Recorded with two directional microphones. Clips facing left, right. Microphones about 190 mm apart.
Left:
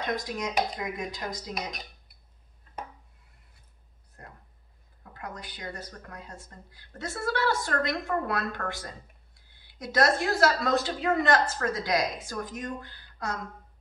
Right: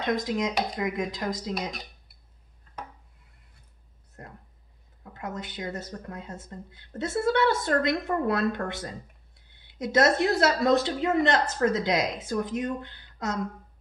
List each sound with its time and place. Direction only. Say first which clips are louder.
0.0 s speech: right 5 dB; 25° right (ahead or behind)
5.1 s speech: right 5 dB; 25° right (ahead or behind)